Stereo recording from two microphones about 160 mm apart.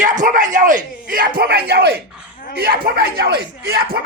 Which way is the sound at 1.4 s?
75° right (ahead or behind).